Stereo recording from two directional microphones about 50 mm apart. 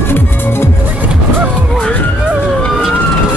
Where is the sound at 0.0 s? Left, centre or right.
Left.